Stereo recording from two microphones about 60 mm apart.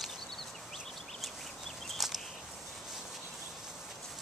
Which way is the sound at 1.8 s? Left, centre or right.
Centre.